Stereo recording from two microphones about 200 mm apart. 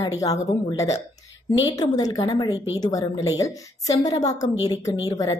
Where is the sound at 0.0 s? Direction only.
20° left (ahead or behind).